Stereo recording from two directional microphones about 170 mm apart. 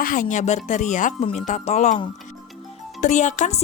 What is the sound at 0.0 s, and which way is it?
Speech, 50° left (ahead or behind).